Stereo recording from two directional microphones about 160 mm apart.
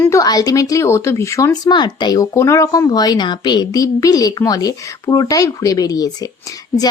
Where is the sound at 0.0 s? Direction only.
20° left (ahead or behind).